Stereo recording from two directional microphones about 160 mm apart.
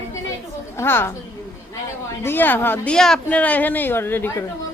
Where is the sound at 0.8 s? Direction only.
15° left (ahead or behind).